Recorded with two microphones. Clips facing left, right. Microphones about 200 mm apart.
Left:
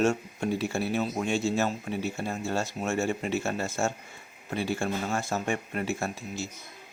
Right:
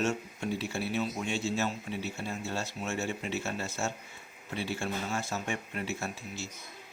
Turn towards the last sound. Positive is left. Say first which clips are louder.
# left 5 dB
turn(degrees=45)  # may be behind; listen again after turning